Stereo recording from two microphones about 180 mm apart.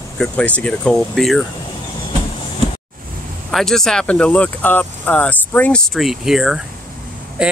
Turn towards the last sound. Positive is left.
turn(degrees=-5)  # may be behind; listen again after turning